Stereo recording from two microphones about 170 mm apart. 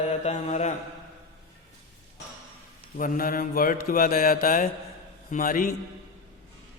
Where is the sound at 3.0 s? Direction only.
55° left (ahead or behind).